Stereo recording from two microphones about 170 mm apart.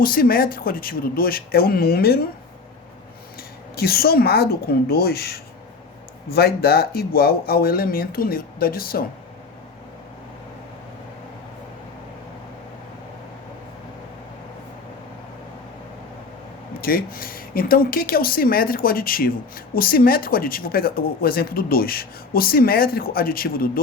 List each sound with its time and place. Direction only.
0.0 s speech: 60° left (ahead or behind)
3.8 s speech: 65° left (ahead or behind)
16.8 s speech: 60° left (ahead or behind)